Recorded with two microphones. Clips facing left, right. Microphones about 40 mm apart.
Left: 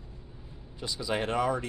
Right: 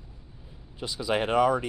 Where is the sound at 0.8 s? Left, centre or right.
Centre.